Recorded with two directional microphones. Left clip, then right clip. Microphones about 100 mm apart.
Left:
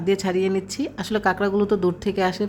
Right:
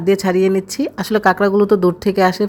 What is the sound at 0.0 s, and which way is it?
A woman's voice, 35° right (ahead or behind).